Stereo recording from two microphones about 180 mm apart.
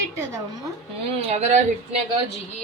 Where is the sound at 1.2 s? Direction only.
35° right (ahead or behind).